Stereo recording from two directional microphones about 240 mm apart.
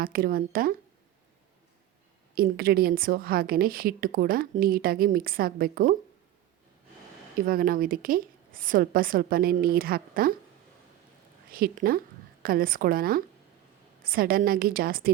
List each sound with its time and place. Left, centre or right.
0.0 s a woman's voice: right
2.3 s a woman's voice: right
7.4 s a woman's voice: right
11.5 s a woman's voice: right